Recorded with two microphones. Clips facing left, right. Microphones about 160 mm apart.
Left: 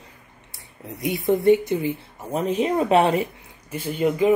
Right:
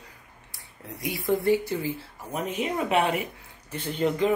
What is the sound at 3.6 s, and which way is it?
Speech, 10° left (ahead or behind).